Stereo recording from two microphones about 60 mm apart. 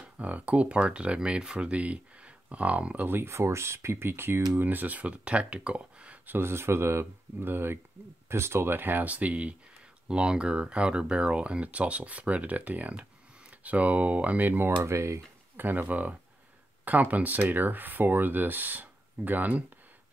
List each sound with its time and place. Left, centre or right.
0.0 s speech: right
3.1 s speech: right; by 6.1 s centre
6.2 s speech: right
14.8 s speech: right
15.5 s speech: right